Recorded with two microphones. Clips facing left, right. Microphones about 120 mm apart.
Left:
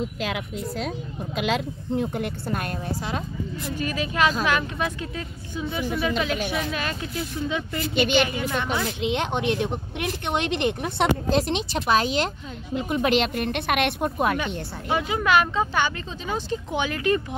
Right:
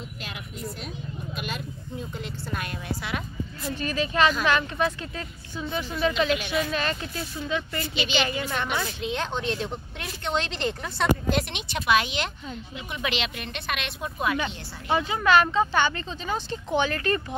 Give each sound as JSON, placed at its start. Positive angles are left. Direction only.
{"t": 1.3, "sound": "speech", "side_deg": 90}
{"t": 3.7, "sound": "speech", "side_deg": 10}
{"t": 7.4, "sound": "speech", "side_deg": 15}
{"t": 7.9, "sound": "speech", "side_deg": 55}
{"t": 8.8, "sound": "speech", "side_deg": 20}
{"t": 11.2, "sound": "speech", "side_deg": 30}
{"t": 14.4, "sound": "speech", "side_deg": 0}